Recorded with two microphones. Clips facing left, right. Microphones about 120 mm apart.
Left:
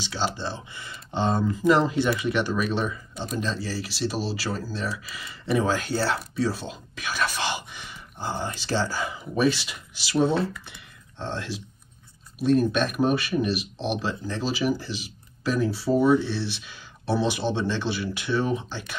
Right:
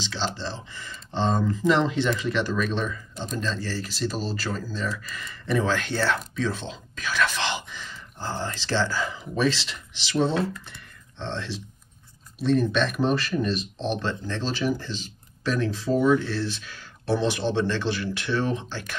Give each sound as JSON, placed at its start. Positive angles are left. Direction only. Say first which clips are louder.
{"t": 0.0, "sound": "speech", "louder": "left 1 dB", "side_deg": 10}